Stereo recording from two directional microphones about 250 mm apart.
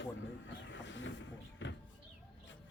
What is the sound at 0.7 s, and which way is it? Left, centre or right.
Vehicle, left.